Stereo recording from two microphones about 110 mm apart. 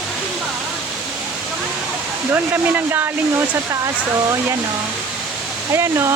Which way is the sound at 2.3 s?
20° right (ahead or behind).